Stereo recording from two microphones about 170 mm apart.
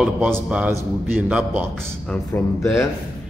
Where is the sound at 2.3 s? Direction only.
10° left (ahead or behind).